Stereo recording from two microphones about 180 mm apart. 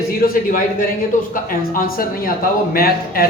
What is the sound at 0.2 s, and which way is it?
A man's voice, 50° left (ahead or behind).